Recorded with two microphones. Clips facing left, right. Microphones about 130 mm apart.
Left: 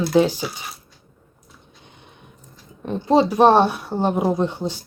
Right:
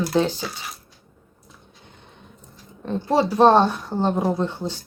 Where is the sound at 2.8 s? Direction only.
20° left (ahead or behind).